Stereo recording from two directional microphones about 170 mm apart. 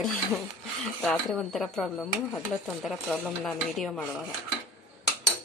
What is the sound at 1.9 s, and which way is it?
Speech, 10° left (ahead or behind).